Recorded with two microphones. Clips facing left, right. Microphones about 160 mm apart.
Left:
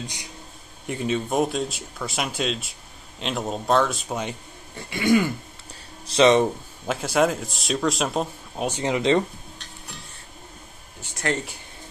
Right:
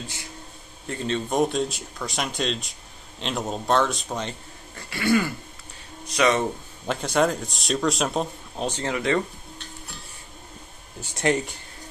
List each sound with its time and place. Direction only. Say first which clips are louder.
0.0 s speech: left 1 dB; 15° left (ahead or behind)
6.9 s speech: left 1 dB; 5° left (ahead or behind); by 9.2 s 20° left (ahead or behind)
11.2 s speech: right 4 dB; 20° right (ahead or behind)